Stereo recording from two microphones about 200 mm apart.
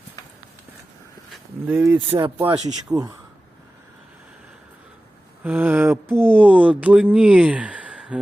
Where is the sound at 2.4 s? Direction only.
20° right (ahead or behind).